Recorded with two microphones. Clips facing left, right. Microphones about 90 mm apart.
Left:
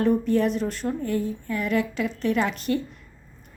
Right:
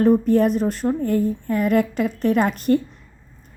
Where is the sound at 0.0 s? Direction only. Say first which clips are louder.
Right 5 dB; 45° right (ahead or behind).